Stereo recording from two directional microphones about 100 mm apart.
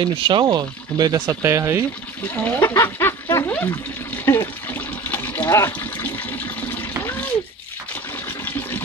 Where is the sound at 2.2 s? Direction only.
15° left (ahead or behind).